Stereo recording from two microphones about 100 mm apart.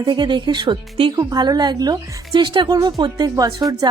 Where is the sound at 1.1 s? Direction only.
40° right (ahead or behind).